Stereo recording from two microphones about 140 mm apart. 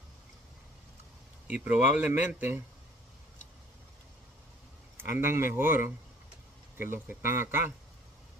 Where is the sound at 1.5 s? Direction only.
10° right (ahead or behind).